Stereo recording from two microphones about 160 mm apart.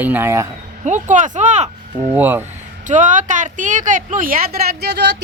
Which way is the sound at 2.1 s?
10° right (ahead or behind).